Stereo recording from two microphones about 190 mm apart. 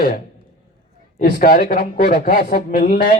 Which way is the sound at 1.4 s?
50° left (ahead or behind).